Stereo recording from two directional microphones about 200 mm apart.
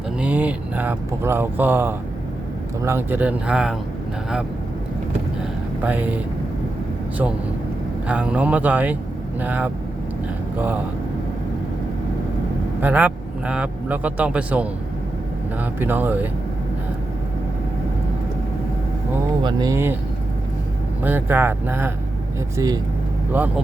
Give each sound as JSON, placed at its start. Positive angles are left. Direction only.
{"t": 0.2, "sound": "speech", "side_deg": -5}
{"t": 5.8, "sound": "speech", "side_deg": -10}
{"t": 8.0, "sound": "speech", "side_deg": -5}
{"t": 12.8, "sound": "a man's voice", "side_deg": -10}
{"t": 19.4, "sound": "speech", "side_deg": -20}
{"t": 21.0, "sound": "speech", "side_deg": -10}